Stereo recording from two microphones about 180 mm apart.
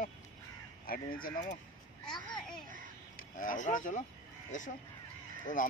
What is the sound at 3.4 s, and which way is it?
Speech, 45° left (ahead or behind).